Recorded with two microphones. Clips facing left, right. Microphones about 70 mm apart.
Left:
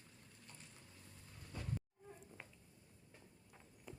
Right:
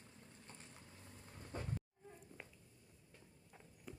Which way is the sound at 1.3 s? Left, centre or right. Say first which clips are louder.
Right 4 dB; right.